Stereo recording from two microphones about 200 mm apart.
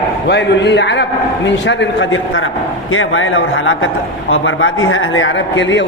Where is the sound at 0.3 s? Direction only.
60° left (ahead or behind).